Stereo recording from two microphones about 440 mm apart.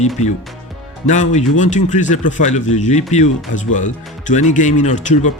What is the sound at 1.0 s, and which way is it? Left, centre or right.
Speech, centre.